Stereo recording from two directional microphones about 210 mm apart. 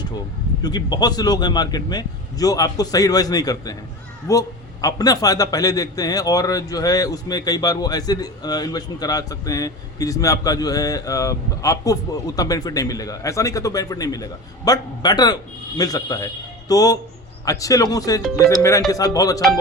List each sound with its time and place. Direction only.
0.6 s a man's voice: 20° left (ahead or behind)